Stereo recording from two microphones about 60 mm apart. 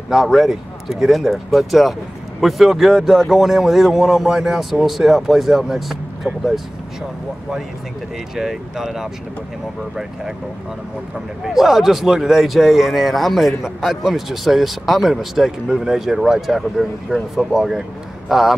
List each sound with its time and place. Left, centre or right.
0.1 s speech: centre
8.4 s speech: centre
11.1 s speech: centre